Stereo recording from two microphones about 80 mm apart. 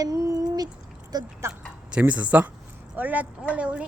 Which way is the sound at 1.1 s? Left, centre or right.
Right.